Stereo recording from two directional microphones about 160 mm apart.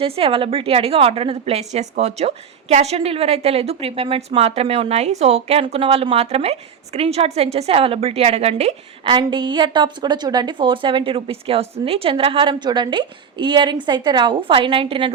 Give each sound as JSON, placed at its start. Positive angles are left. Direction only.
{"t": 0.0, "sound": "a woman's voice", "side_deg": -35}
{"t": 9.1, "sound": "a woman's voice", "side_deg": -30}